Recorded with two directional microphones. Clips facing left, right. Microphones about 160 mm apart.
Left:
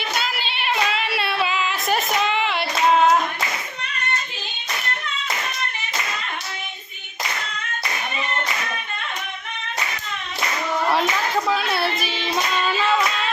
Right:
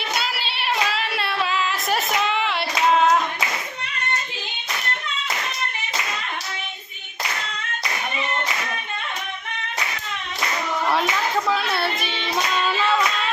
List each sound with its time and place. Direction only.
0.2 s child singing: 5° right (ahead or behind)
2.2 s hands: centre (ahead or behind)
10.9 s child singing: centre (ahead or behind)